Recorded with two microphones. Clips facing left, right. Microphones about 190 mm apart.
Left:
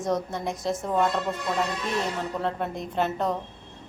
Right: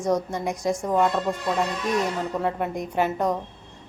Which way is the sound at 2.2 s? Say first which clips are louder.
Right 3 dB; 10° right (ahead or behind).